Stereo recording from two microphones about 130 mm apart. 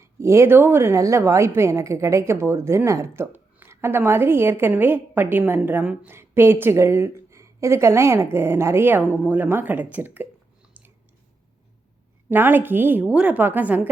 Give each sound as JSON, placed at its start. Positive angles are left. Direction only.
{"t": 0.0, "sound": "a woman's voice", "side_deg": -20}
{"t": 12.3, "sound": "a woman's voice", "side_deg": -15}